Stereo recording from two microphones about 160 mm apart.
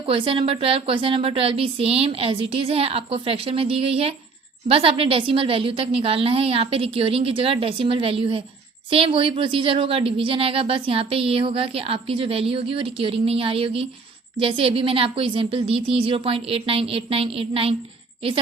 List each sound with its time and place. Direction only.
0.0 s speech: 35° right (ahead or behind)